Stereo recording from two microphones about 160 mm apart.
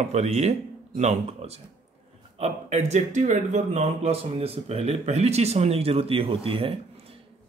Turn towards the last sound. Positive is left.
turn(degrees=-35)  # may be behind; listen again after turning